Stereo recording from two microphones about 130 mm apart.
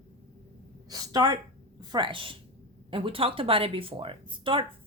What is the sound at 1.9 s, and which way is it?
Speech, 40° right (ahead or behind).